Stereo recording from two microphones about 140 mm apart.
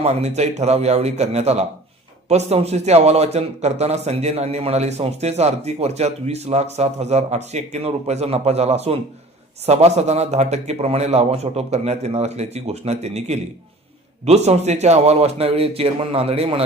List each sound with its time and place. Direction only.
0.0 s a man's voice: 50° right (ahead or behind)